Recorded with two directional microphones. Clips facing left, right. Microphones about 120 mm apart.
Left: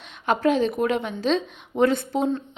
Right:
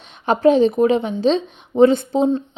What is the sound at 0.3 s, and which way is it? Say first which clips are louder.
Speech: right 7 dB; 30° right (ahead or behind).